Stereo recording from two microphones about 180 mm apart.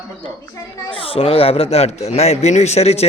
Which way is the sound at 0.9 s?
30° left (ahead or behind).